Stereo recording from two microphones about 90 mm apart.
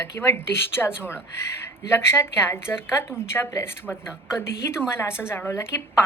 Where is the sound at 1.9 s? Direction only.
30° left (ahead or behind).